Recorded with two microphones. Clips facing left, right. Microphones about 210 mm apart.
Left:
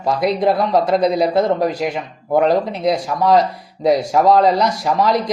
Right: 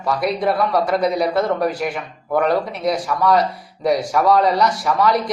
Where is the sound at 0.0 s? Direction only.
25° left (ahead or behind).